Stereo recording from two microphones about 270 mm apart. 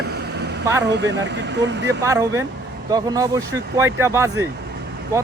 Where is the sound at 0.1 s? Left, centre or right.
Right.